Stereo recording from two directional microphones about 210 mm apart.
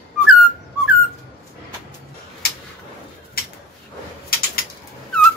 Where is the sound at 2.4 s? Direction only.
50° left (ahead or behind).